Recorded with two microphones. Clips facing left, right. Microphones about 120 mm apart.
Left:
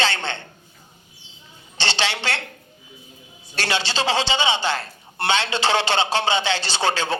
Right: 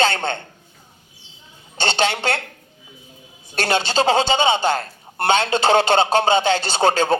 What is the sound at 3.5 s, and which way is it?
A man's voice, 45° right (ahead or behind).